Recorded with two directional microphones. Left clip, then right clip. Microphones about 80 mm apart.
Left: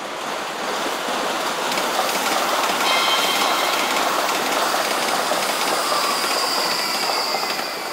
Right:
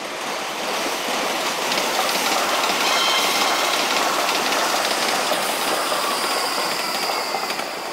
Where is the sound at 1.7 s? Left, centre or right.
Left.